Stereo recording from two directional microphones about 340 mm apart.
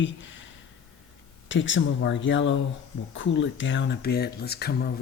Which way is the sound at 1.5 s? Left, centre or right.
Left.